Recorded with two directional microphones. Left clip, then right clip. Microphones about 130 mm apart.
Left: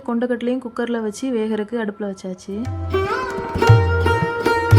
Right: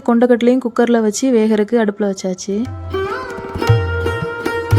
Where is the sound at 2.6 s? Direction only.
Centre (ahead or behind).